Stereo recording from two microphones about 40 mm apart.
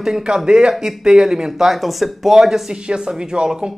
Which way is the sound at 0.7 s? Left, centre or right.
Centre.